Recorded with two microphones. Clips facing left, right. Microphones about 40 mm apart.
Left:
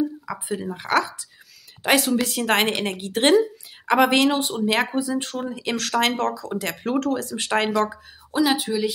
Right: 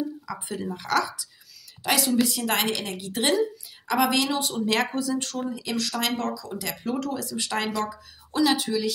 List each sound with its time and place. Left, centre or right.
0.3 s speech: centre
1.8 s a woman's voice: left
8.3 s speech: centre